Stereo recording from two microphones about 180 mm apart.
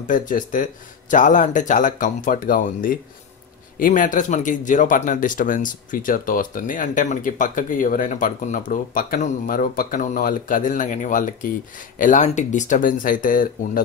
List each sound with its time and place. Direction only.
0.0 s speech: 45° left (ahead or behind)